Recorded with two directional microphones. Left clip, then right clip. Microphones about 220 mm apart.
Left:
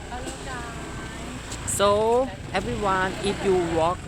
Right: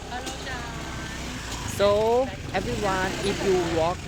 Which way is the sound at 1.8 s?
10° left (ahead or behind).